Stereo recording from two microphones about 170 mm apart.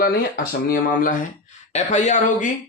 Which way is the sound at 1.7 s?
45° left (ahead or behind).